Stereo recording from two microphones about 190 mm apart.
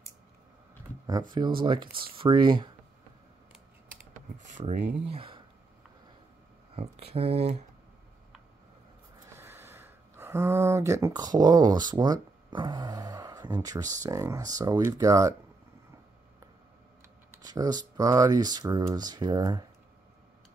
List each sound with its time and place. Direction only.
1.6 s speech: 25° right (ahead or behind)
4.1 s computer keyboard: 40° right (ahead or behind)
5.0 s speech: 30° right (ahead or behind)
6.7 s speech: 30° right (ahead or behind)
9.3 s speech: 10° right (ahead or behind)
17.5 s speech: 20° right (ahead or behind)